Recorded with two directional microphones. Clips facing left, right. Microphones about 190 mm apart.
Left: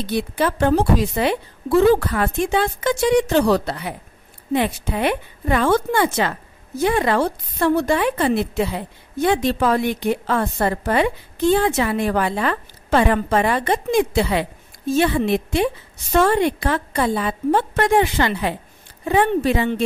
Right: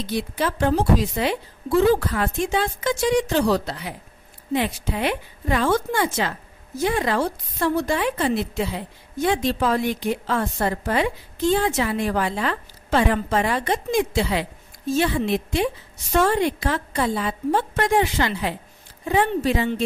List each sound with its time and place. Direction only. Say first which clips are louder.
0.1 s a woman's voice: left 4 dB; 60° left (ahead or behind)